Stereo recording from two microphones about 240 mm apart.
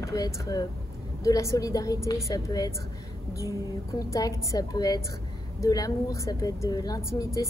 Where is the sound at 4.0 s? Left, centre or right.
Centre.